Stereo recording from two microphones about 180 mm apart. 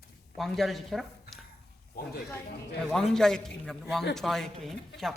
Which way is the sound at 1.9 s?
60° left (ahead or behind).